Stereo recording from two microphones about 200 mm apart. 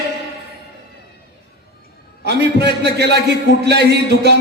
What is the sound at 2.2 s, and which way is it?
A man's voice, 55° right (ahead or behind).